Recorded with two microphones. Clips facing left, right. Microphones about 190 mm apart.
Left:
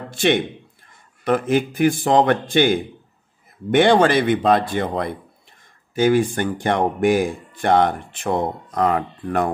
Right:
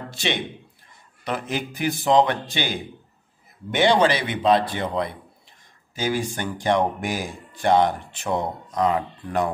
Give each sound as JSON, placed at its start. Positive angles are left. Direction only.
{"t": 0.1, "sound": "a man's voice", "side_deg": 50}